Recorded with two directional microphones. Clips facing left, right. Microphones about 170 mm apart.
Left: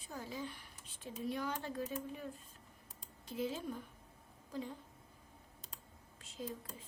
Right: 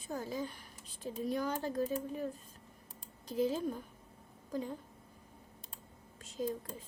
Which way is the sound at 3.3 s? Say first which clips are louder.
Right 7 dB; 40° right (ahead or behind).